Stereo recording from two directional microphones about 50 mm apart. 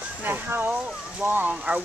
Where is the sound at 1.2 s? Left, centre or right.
Right.